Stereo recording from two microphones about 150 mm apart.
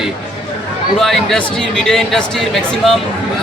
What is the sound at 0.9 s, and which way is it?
Speech, centre (ahead or behind).